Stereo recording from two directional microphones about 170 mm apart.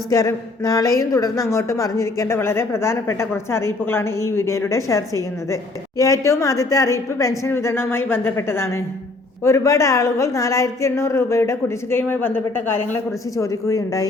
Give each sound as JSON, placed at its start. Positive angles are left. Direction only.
{"t": 0.1, "sound": "a woman's voice", "side_deg": 20}